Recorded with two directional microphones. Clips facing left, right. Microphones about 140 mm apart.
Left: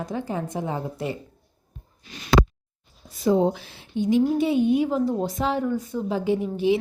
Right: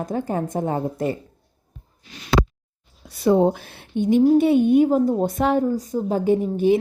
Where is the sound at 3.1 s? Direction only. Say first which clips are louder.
Right 3 dB; 65° right (ahead or behind).